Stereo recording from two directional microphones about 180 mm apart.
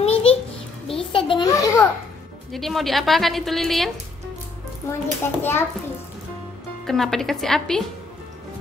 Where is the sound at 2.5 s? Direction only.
Centre (ahead or behind).